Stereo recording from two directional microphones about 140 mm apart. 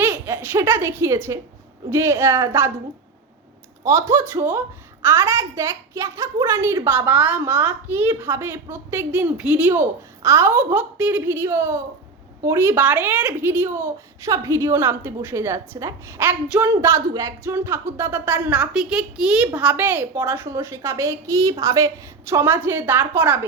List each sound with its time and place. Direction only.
0.0 s a woman's voice: 15° right (ahead or behind)
3.8 s a woman's voice: 20° right (ahead or behind)